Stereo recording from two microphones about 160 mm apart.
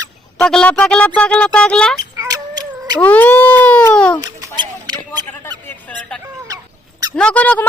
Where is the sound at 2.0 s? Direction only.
20° right (ahead or behind).